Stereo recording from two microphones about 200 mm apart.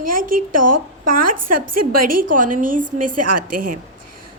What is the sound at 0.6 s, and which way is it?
Speech, 75° right (ahead or behind).